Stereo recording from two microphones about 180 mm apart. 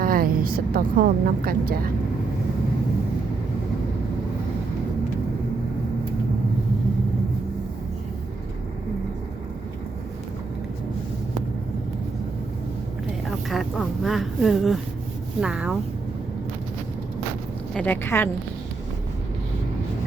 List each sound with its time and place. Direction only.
0.0 s a woman's voice: 50° right (ahead or behind)
13.5 s a sound: centre (ahead or behind)
15.4 s speech: 5° right (ahead or behind)
17.7 s a woman's voice: 10° left (ahead or behind)